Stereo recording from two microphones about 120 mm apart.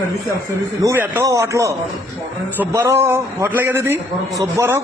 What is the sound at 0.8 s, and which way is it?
A man's voice, 25° right (ahead or behind).